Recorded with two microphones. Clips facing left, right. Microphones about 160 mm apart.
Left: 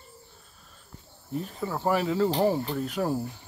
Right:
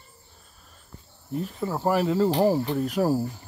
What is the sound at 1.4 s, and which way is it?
Cricket, 5° right (ahead or behind).